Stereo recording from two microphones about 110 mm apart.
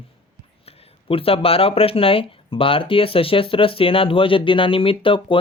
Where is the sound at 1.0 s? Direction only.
60° left (ahead or behind).